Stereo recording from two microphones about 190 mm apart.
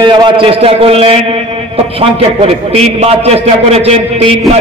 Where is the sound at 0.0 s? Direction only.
25° right (ahead or behind).